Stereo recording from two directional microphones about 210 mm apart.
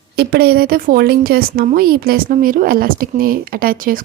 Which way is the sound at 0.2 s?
50° right (ahead or behind).